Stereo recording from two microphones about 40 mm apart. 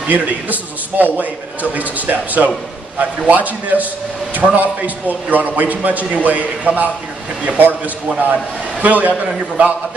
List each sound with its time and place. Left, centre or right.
0.1 s a man's voice: right